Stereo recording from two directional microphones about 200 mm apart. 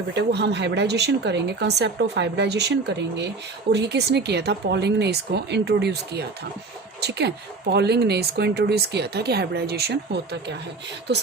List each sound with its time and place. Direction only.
0.1 s speech: 55° right (ahead or behind)